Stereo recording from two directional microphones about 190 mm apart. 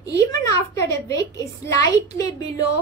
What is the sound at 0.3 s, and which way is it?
A woman's voice, 15° left (ahead or behind).